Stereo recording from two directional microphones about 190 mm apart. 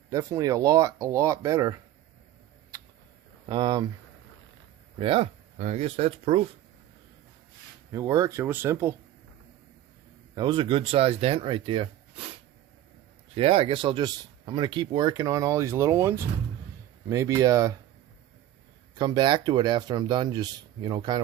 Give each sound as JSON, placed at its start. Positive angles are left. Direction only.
{"t": 0.1, "sound": "speech", "side_deg": -15}
{"t": 3.5, "sound": "speech", "side_deg": -20}
{"t": 4.9, "sound": "speech", "side_deg": -30}
{"t": 7.9, "sound": "speech", "side_deg": -15}
{"t": 10.3, "sound": "speech", "side_deg": -25}
{"t": 18.9, "sound": "speech", "side_deg": -20}